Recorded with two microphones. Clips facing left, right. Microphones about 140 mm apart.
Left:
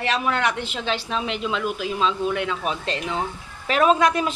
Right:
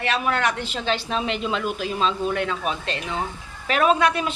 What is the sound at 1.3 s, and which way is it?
Speech, centre (ahead or behind).